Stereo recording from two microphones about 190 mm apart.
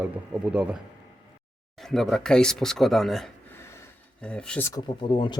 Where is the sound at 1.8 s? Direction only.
Centre (ahead or behind).